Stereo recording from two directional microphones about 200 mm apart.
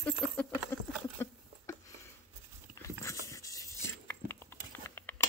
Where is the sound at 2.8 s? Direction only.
15° left (ahead or behind).